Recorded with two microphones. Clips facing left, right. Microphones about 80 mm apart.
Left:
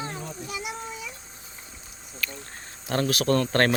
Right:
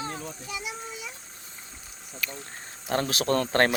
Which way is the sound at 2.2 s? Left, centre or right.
Centre.